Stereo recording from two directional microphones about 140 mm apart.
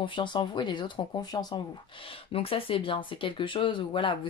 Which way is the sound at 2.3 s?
40° left (ahead or behind).